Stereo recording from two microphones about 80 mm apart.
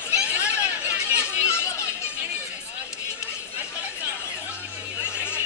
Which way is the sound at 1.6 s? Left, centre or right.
Left.